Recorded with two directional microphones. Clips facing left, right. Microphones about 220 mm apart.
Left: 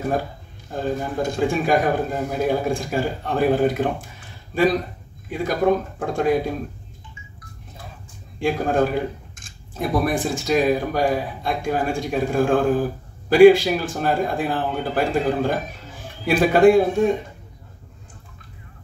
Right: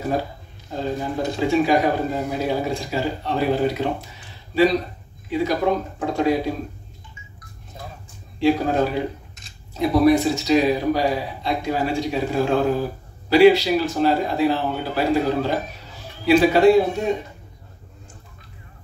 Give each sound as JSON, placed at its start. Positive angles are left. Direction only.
{"t": 0.7, "sound": "speech", "side_deg": 50}
{"t": 8.4, "sound": "speech", "side_deg": 50}